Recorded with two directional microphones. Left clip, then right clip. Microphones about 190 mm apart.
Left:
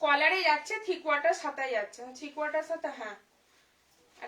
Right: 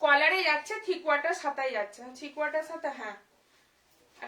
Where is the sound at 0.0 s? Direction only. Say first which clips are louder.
Right 2 dB; 20° right (ahead or behind).